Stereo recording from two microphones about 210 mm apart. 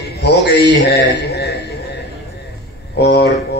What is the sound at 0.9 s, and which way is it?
Speech, 50° left (ahead or behind).